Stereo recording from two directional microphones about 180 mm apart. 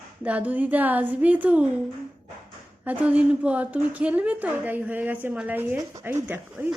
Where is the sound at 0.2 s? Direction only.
10° right (ahead or behind).